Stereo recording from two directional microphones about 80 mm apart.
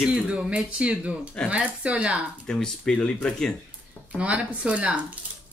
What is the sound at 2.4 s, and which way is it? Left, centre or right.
Speech, centre.